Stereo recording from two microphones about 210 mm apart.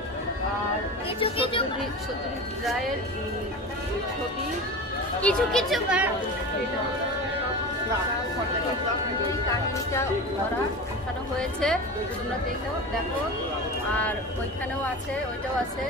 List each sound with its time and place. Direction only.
1.2 s a sound: 25° left (ahead or behind)
5.2 s speech: 5° left (ahead or behind)
11.3 s speech: 5° left (ahead or behind)